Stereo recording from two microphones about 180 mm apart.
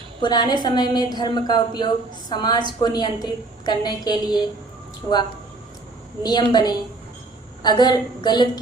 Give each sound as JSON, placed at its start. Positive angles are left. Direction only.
{"t": 0.2, "sound": "a woman's voice", "side_deg": 25}
{"t": 6.2, "sound": "a woman's voice", "side_deg": 25}